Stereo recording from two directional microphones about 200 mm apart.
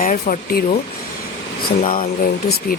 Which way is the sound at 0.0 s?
40° left (ahead or behind).